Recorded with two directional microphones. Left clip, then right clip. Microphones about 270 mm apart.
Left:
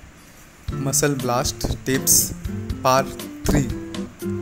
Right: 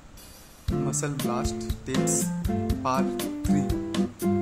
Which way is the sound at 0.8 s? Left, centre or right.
Centre.